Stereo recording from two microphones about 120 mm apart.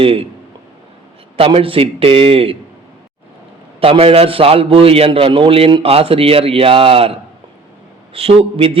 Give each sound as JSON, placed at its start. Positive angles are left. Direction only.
{"t": 0.0, "sound": "a man's voice", "side_deg": -50}
{"t": 1.4, "sound": "a man's voice", "side_deg": -50}
{"t": 3.8, "sound": "a man's voice", "side_deg": -50}